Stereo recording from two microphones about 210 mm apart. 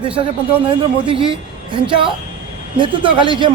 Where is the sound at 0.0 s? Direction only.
25° right (ahead or behind).